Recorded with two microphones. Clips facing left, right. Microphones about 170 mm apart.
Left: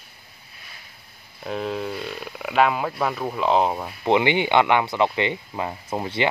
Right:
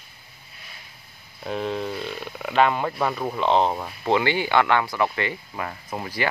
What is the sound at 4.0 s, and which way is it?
Speech, 20° left (ahead or behind).